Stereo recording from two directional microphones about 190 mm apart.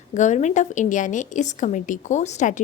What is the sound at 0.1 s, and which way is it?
A woman's voice, 40° left (ahead or behind).